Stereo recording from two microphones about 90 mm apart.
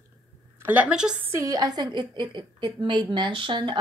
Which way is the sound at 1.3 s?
40° right (ahead or behind).